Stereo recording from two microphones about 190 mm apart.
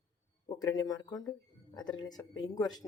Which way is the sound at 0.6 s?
20° left (ahead or behind).